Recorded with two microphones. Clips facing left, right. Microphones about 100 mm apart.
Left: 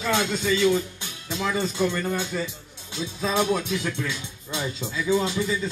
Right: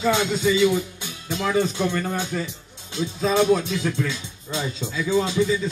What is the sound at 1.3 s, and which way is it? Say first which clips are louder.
Music: right 4 dB; 15° right (ahead or behind).